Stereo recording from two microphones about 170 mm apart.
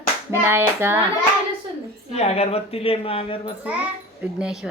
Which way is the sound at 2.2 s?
40° left (ahead or behind).